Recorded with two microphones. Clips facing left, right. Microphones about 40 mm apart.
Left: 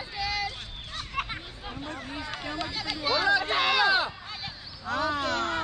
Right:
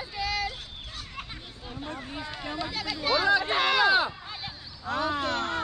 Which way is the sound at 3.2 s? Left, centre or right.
Centre.